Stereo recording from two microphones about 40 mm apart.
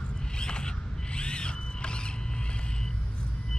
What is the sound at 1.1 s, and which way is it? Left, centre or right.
Zipper, left.